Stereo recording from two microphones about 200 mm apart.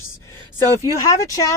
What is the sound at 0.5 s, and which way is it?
Speech, 15° left (ahead or behind).